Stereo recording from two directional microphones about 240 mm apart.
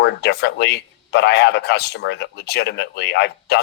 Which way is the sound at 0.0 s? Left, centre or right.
Left.